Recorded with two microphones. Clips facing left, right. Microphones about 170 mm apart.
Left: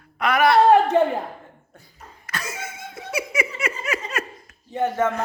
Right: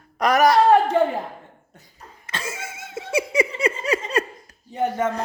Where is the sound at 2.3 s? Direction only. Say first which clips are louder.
Even; 25° right (ahead or behind).